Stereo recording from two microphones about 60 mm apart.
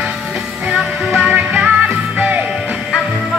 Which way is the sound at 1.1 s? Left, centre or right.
Right.